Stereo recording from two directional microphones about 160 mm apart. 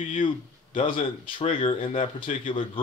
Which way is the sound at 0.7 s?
30° left (ahead or behind).